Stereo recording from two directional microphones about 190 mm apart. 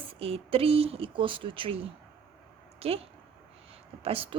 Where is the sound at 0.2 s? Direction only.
30° right (ahead or behind).